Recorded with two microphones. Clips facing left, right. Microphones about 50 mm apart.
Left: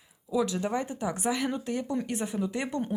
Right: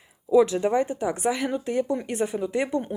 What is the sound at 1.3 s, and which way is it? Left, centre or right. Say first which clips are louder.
Speech: right 2 dB; centre.